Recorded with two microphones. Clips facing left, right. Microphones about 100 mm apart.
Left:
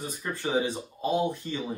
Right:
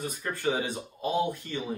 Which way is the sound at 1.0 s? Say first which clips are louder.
Left 1 dB; 20° left (ahead or behind).